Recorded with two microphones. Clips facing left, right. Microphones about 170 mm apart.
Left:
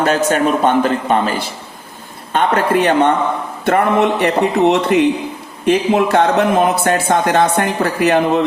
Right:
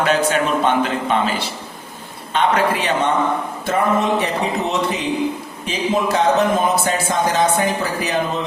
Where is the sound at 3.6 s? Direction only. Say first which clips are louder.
Left 5 dB; 65° left (ahead or behind).